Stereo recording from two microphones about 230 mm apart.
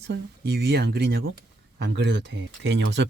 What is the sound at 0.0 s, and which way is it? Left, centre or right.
Speech, right.